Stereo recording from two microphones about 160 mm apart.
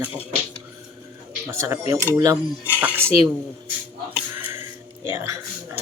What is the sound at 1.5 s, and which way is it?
Speech, 15° right (ahead or behind).